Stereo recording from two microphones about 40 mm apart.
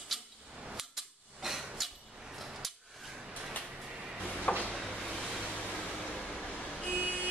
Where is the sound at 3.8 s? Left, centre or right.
Right.